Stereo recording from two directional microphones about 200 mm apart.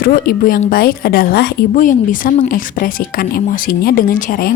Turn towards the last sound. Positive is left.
turn(degrees=45)  # may be behind; listen again after turning